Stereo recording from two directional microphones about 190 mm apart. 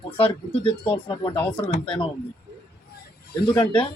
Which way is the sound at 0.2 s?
30° left (ahead or behind).